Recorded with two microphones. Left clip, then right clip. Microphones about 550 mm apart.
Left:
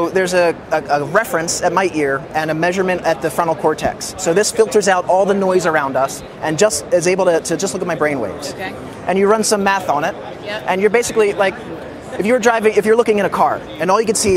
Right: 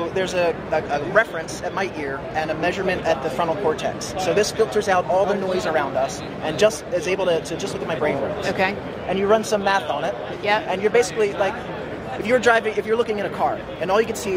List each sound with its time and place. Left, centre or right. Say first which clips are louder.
0.0 s speech: left 7 dB; left
9.1 s speech: left 5 dB; left